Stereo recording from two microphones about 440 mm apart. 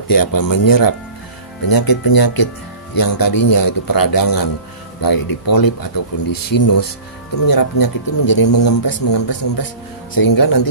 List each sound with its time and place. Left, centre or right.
0.1 s speech: left